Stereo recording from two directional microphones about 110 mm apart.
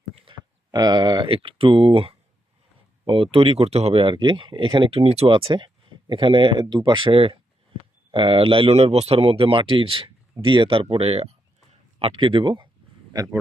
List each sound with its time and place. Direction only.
0.3 s a sound: 50° right (ahead or behind)
0.7 s speech: 40° right (ahead or behind); by 2.1 s 55° right (ahead or behind)
3.3 s speech: 60° right (ahead or behind)
4.0 s speech: 45° right (ahead or behind); by 5.3 s 70° right (ahead or behind)
5.3 s speech: 50° right (ahead or behind)